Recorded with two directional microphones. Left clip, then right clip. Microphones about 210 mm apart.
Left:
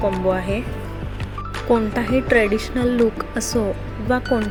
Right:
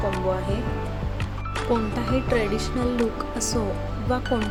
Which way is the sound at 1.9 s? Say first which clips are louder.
Left 6 dB; 15° left (ahead or behind).